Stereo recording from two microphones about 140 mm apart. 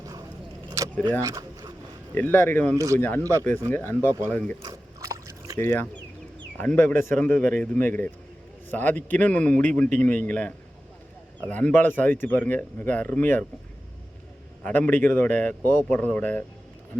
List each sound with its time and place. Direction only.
0.0 s vehicle: 25° right (ahead or behind)
0.8 s keys jangling: 20° right (ahead or behind)
1.2 s speech: 25° right (ahead or behind)
2.1 s speech: 15° left (ahead or behind)
2.7 s speech: 20° right (ahead or behind)
3.0 s speech: 15° left (ahead or behind)
4.6 s a sound: 25° right (ahead or behind)
5.5 s speech: 15° left (ahead or behind)
14.6 s speech: 10° left (ahead or behind)